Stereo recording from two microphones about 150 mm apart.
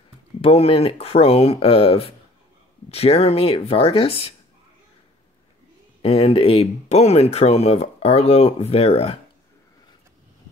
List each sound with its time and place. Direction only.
0.4 s speech: 40° left (ahead or behind)
6.0 s speech: 40° left (ahead or behind)